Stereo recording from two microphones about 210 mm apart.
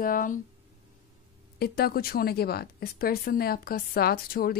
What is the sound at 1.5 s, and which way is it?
A woman's voice, 45° left (ahead or behind).